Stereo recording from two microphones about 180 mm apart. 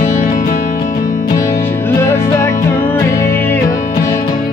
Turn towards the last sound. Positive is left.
turn(degrees=10)  # may be behind; listen again after turning